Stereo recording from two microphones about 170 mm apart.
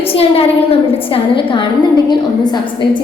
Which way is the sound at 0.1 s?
35° left (ahead or behind).